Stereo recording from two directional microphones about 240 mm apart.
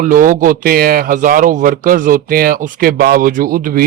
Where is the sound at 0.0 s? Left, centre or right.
Right.